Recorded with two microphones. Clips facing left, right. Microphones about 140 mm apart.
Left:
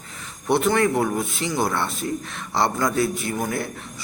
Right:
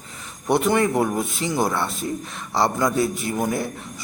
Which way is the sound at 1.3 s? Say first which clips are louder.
Right 1 dB; 40° right (ahead or behind).